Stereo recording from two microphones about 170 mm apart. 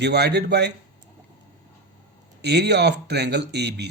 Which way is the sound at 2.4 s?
80° right.